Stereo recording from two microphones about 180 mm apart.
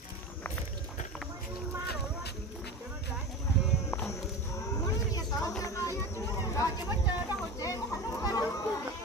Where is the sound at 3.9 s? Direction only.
15° left (ahead or behind).